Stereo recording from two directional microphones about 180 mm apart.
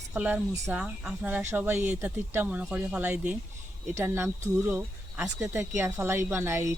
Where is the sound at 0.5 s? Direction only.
15° right (ahead or behind).